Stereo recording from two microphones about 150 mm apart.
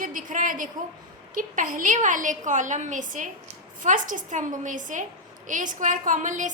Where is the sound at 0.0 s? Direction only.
65° right (ahead or behind).